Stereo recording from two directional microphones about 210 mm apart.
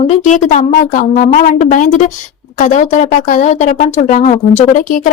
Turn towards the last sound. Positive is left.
turn(degrees=40)  # may be behind; listen again after turning